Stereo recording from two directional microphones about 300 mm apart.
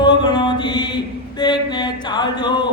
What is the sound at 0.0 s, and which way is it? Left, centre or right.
Mantra, centre.